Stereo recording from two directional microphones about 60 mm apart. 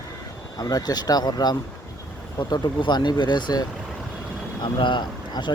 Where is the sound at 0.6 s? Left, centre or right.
Left.